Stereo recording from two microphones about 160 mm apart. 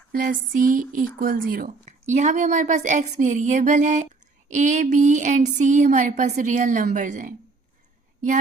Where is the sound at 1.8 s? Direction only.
50° right (ahead or behind).